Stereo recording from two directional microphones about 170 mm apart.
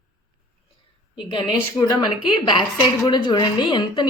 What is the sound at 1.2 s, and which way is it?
A woman's voice, 25° left (ahead or behind).